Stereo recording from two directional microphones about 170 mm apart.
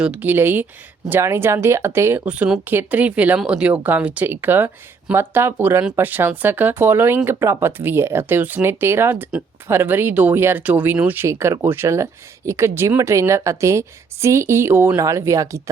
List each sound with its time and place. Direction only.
0.0 s speech: 10° right (ahead or behind)